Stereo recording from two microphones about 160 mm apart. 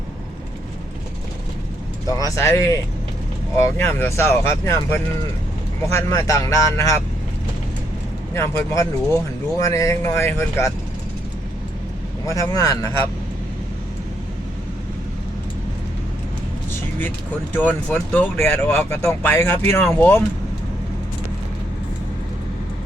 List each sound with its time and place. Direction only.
2.0 s speech: 20° left (ahead or behind)
8.4 s speech: 20° left (ahead or behind)
12.3 s speech: 20° left (ahead or behind)
17.5 s speech: 10° left (ahead or behind)